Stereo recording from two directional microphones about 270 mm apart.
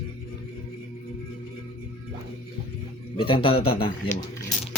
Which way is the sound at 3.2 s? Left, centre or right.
Centre.